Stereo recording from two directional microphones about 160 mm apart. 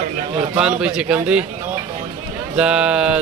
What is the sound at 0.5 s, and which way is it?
Speech, 5° right (ahead or behind).